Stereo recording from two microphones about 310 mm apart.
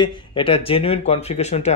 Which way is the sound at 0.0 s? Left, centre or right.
Centre.